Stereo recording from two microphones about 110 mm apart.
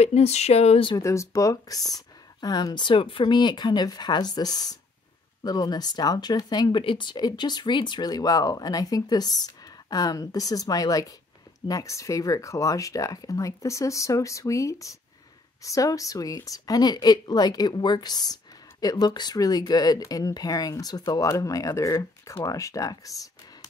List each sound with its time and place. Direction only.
0.0 s speech: 75° left (ahead or behind)
0.9 s a woman's voice: 30° left (ahead or behind)
6.8 s a woman's voice: 50° left (ahead or behind); by 23.3 s 30° left (ahead or behind)